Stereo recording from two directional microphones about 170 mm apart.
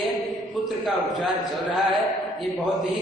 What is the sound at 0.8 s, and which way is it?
A man's voice, centre (ahead or behind).